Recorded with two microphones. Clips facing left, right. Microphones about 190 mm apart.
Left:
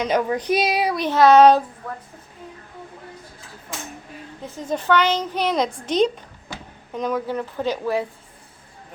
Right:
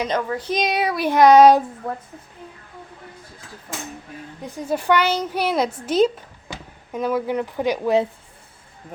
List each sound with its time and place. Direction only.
0.1 s speech: 15° left (ahead or behind)
0.6 s a woman's voice: centre (ahead or behind)
4.4 s a woman's voice: 10° right (ahead or behind)